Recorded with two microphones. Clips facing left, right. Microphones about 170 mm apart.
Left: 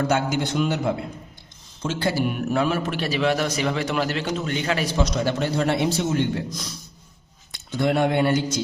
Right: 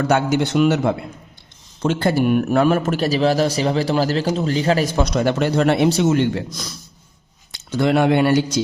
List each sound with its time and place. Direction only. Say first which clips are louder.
0.1 s a man's voice: right 5 dB; 70° right (ahead or behind)
1.8 s a man's voice: right 6 dB; 55° right (ahead or behind); by 6.7 s 80° right
7.5 s speech: right 5 dB; 90° right; by 8.6 s 75° right (ahead or behind)